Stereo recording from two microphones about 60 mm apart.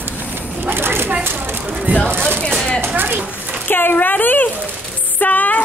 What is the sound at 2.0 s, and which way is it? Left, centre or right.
A woman's voice, right.